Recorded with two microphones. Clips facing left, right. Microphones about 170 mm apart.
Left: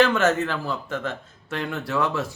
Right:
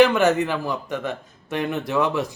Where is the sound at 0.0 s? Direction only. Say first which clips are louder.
Right 3 dB; 15° right (ahead or behind).